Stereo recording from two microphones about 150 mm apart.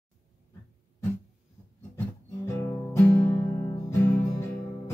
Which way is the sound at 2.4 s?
20° left (ahead or behind).